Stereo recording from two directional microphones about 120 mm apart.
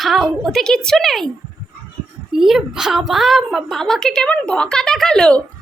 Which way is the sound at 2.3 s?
5° right (ahead or behind).